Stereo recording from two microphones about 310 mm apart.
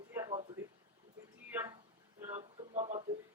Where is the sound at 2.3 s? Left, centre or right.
Centre.